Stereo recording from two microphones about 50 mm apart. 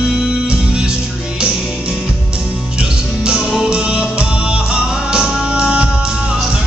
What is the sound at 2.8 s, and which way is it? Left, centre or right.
Music, centre.